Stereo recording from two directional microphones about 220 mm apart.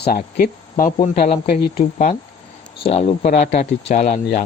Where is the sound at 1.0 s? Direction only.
30° left (ahead or behind).